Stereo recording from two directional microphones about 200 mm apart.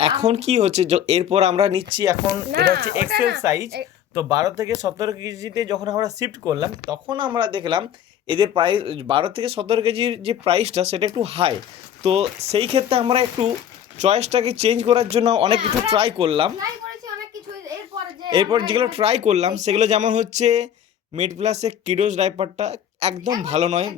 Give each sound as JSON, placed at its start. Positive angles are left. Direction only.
{"t": 0.2, "sound": "speech", "side_deg": -35}
{"t": 2.5, "sound": "speech", "side_deg": -50}
{"t": 3.4, "sound": "speech", "side_deg": -15}
{"t": 18.2, "sound": "speech", "side_deg": -25}